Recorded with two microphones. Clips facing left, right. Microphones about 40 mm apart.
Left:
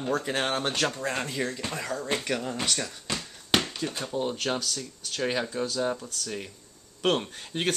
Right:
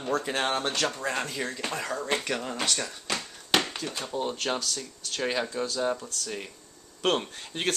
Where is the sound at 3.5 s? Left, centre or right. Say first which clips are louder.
Right 1 dB; right.